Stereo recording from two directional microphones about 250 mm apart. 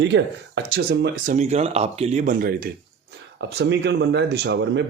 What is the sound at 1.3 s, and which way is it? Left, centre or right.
Speech, right.